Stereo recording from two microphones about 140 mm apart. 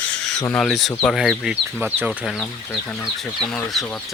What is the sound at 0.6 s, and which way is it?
Speech, centre (ahead or behind).